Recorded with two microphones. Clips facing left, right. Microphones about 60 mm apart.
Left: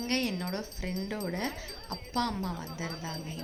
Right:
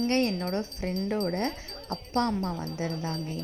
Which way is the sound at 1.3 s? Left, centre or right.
Right.